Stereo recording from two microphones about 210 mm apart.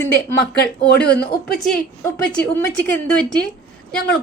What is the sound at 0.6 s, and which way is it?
Speech, 50° left (ahead or behind).